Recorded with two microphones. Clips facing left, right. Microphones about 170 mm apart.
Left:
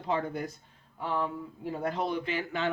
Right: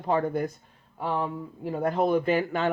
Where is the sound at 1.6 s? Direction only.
50° right (ahead or behind).